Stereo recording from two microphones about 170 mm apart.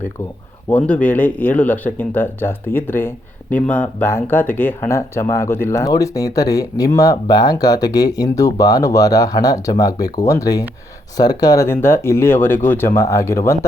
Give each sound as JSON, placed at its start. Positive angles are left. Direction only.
{"t": 0.7, "sound": "speech", "side_deg": 10}